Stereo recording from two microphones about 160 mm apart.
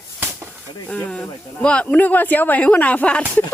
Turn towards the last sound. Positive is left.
turn(degrees=10)  # may be behind; listen again after turning